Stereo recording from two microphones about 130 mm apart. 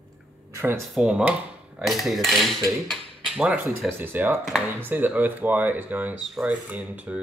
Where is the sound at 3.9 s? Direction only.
15° right (ahead or behind).